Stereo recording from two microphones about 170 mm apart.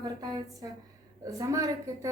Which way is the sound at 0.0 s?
25° right (ahead or behind).